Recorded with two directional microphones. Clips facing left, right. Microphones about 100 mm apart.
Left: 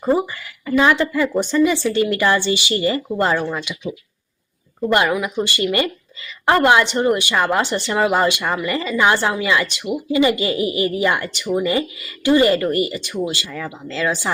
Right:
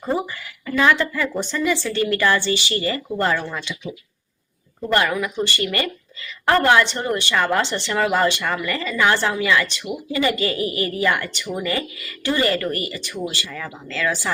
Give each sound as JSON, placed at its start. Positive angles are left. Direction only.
{"t": 0.0, "sound": "speech", "side_deg": 20}
{"t": 4.9, "sound": "speech", "side_deg": 15}